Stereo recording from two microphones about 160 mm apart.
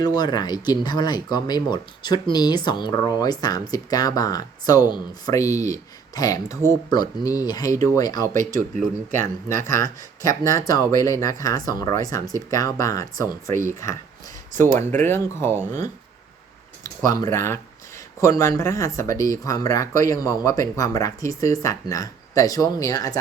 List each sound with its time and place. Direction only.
0.0 s speech: 25° left (ahead or behind)
14.9 s speech: 15° left (ahead or behind)
16.8 s speech: 20° left (ahead or behind)